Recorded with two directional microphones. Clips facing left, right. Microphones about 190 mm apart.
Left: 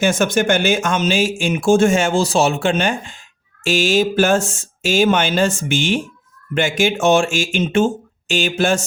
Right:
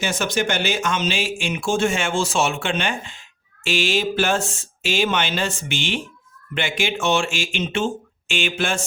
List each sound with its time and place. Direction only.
0.0 s speech: 50° left (ahead or behind)